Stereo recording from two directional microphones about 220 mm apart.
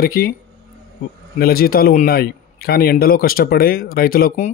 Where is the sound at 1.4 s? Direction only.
45° left (ahead or behind).